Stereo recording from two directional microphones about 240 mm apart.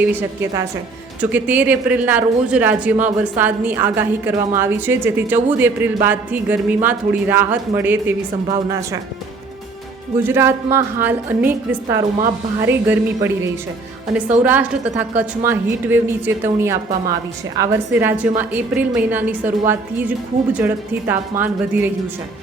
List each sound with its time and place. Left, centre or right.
0.0 s speech: centre
10.2 s speech: centre
14.4 s speech: centre